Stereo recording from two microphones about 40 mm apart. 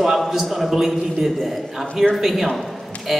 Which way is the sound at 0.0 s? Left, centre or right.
Centre.